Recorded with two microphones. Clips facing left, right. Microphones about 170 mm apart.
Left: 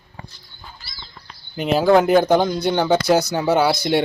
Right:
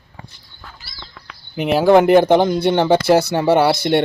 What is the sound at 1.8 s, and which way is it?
Speech, 5° right (ahead or behind).